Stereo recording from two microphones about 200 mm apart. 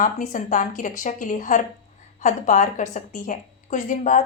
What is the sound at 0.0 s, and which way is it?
A woman's voice, 40° left (ahead or behind).